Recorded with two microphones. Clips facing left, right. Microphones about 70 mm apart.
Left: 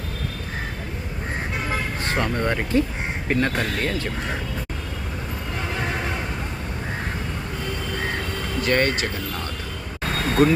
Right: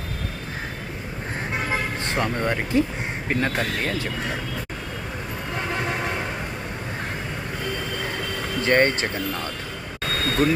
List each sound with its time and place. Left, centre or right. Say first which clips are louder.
2.1 s speech: left 1 dB; centre
8.6 s speech: right 2 dB; right
10.4 s speech: left 3 dB; centre